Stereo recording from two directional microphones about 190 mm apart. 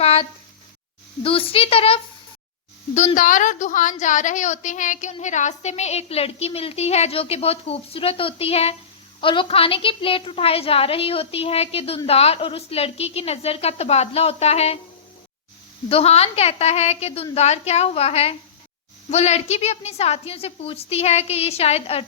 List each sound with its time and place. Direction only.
0.0 s a sound: 30° left (ahead or behind)
1.2 s a woman's voice: 30° left (ahead or behind)
15.9 s a woman's voice: 30° left (ahead or behind)